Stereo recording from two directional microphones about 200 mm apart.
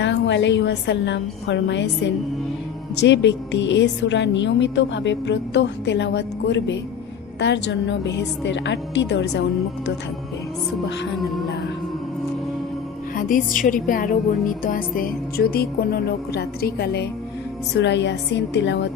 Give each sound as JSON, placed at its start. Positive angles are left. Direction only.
{"t": 0.0, "sound": "a woman's voice", "side_deg": 60}
{"t": 13.1, "sound": "a woman's voice", "side_deg": 45}